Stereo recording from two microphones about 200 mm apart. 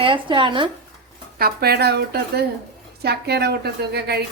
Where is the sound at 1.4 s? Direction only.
50° right (ahead or behind).